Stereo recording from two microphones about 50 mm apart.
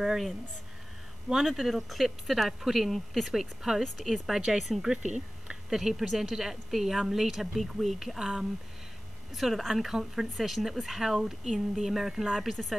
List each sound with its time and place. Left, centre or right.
0.0 s speech: centre
1.3 s speech: centre
4.9 s a sound: centre
5.8 s speech: centre
9.3 s speech: centre